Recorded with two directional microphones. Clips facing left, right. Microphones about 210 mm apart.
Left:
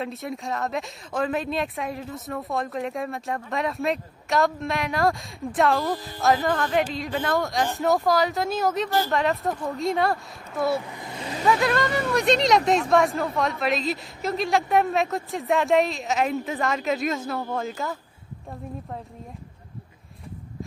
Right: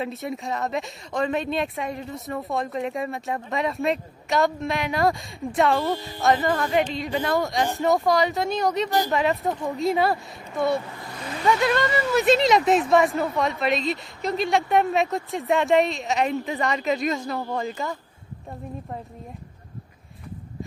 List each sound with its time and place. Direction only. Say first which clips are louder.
0.0 s speech: right 2 dB; centre (ahead or behind)
11.0 s a sound: left 1 dB; 20° left (ahead or behind)
11.4 s speech: right 1 dB; centre (ahead or behind)